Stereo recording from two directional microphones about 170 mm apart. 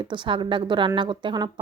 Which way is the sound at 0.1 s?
30° right (ahead or behind).